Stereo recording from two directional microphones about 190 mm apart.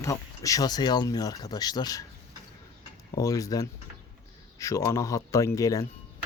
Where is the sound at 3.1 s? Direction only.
20° left (ahead or behind).